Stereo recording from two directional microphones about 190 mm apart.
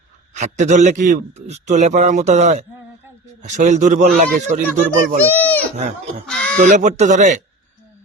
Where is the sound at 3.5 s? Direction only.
40° right (ahead or behind).